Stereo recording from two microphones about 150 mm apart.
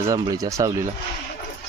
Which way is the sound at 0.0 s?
20° right (ahead or behind).